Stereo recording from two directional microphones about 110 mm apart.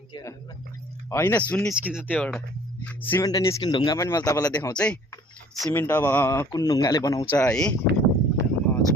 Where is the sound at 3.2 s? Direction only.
30° left (ahead or behind).